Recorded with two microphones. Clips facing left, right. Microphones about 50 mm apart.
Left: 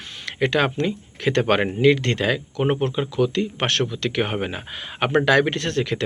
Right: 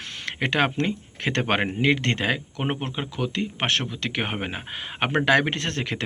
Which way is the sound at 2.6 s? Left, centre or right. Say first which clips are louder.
Left 10 dB; centre.